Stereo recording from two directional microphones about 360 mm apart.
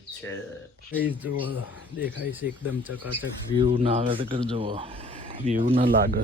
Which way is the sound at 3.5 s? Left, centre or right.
Centre.